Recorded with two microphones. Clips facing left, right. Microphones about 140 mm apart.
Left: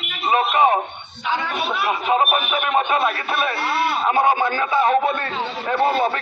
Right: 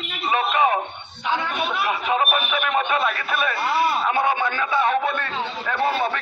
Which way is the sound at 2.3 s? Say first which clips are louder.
Left 2 dB; 25° left (ahead or behind).